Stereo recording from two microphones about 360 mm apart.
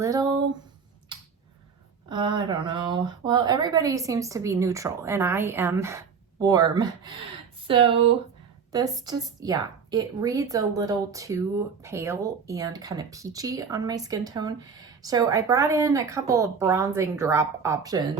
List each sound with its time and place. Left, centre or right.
0.0 s a woman's voice: centre
2.0 s a woman's voice: centre